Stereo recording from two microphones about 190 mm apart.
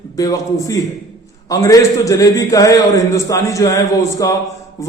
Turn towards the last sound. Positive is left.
turn(degrees=15)  # may be behind; listen again after turning